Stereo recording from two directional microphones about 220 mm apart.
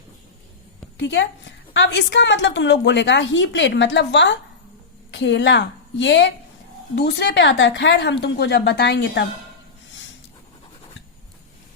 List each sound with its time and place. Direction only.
0.9 s a woman's voice: 55° left (ahead or behind)